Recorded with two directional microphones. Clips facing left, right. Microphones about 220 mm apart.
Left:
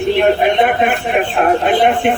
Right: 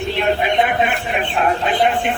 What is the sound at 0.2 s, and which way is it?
A man's voice, 50° left (ahead or behind).